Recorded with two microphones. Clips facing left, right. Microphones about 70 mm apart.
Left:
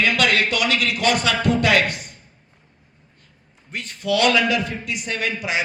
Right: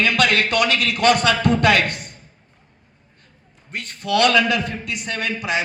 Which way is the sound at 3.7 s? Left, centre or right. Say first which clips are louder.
Right 1 dB; right.